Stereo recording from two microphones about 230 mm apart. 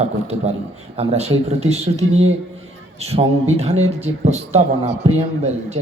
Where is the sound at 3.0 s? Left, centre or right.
Right.